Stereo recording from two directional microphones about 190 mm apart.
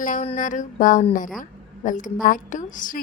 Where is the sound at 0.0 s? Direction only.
45° left (ahead or behind).